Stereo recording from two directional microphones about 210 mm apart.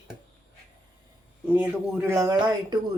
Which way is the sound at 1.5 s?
10° right (ahead or behind).